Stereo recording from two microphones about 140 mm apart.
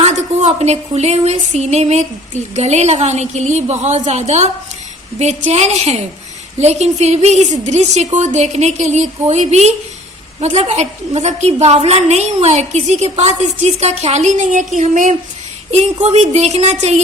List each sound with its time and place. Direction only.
0.0 s a woman's voice: 50° right (ahead or behind)
15.7 s a woman's voice: 50° right (ahead or behind)